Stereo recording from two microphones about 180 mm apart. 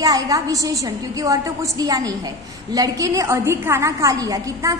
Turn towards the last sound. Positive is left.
turn(degrees=-20)  # may be behind; listen again after turning